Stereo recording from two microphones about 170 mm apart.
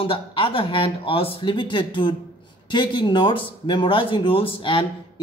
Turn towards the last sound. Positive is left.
turn(degrees=30)  # may be behind; listen again after turning